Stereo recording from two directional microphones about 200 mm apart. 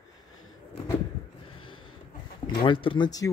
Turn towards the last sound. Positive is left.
turn(degrees=20)  # may be behind; listen again after turning